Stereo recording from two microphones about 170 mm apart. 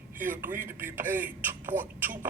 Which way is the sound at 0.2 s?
50° right (ahead or behind).